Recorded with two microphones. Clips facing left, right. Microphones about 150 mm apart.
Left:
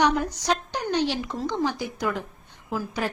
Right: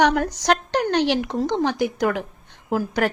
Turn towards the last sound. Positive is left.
turn(degrees=-70)  # may be behind; listen again after turning